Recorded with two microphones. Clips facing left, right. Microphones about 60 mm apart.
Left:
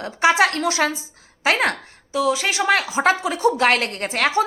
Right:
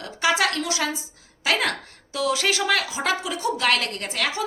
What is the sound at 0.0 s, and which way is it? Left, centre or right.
Speech, left.